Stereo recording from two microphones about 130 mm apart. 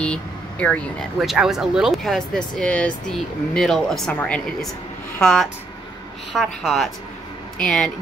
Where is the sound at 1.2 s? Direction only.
5° right (ahead or behind).